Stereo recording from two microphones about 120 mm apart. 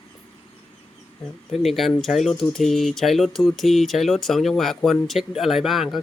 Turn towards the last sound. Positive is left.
turn(degrees=0)  # may be behind; listen again after turning